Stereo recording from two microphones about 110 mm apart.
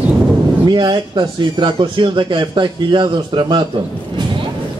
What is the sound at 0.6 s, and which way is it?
Speech, 45° right (ahead or behind).